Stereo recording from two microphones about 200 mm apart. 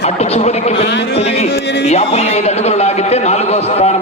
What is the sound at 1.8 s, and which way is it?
A man's voice, 30° left (ahead or behind).